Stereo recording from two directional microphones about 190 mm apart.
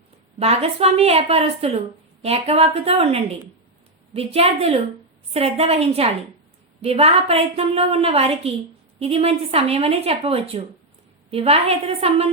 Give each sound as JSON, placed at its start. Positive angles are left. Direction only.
{"t": 0.3, "sound": "a woman's voice", "side_deg": -35}